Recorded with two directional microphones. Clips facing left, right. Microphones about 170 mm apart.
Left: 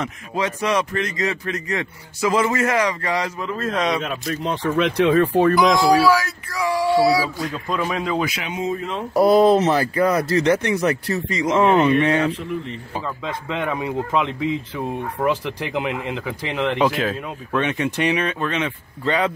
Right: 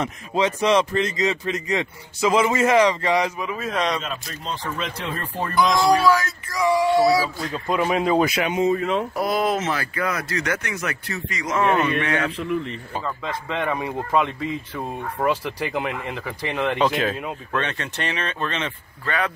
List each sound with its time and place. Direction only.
0.0 s speech: 25° right (ahead or behind)
3.7 s speech: centre (ahead or behind)
4.0 s speech: 65° left (ahead or behind)
5.5 s speech: centre (ahead or behind)
7.6 s speech: 25° right (ahead or behind)
8.2 s speech: 55° right (ahead or behind)
9.1 s speech: 30° left (ahead or behind)
12.9 s speech: 5° left (ahead or behind)
17.6 s speech: 10° left (ahead or behind)
19.0 s speech: 20° left (ahead or behind)